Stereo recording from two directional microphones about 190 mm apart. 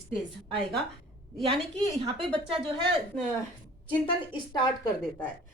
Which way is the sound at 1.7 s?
25° right (ahead or behind).